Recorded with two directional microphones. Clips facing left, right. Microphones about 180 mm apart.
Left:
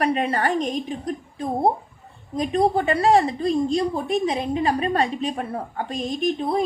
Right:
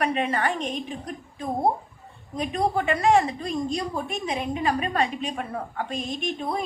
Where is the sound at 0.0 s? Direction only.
35° left (ahead or behind).